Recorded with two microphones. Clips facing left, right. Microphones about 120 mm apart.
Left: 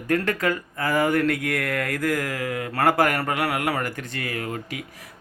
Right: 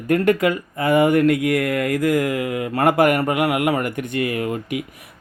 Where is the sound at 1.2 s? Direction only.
10° right (ahead or behind).